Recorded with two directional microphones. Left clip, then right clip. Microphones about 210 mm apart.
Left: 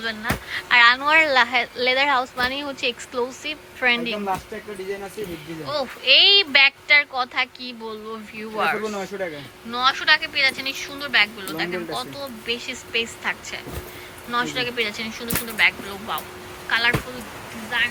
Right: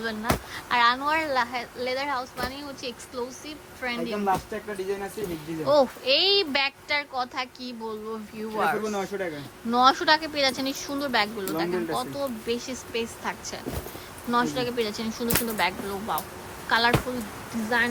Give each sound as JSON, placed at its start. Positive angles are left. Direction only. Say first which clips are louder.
{"t": 0.0, "sound": "speech", "louder": "left 2 dB", "side_deg": -15}
{"t": 5.6, "sound": "speech", "louder": "even", "side_deg": -20}
{"t": 8.9, "sound": "speech", "louder": "left 1 dB", "side_deg": 5}
{"t": 9.7, "sound": "speech", "louder": "left 1 dB", "side_deg": -25}